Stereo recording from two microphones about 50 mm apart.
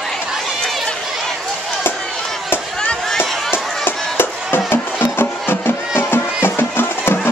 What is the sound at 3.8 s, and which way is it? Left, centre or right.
Music, left.